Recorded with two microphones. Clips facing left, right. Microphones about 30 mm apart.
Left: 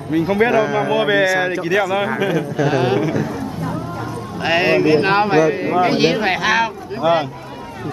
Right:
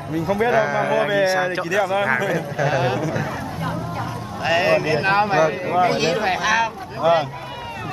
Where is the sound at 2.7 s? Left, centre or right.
Centre.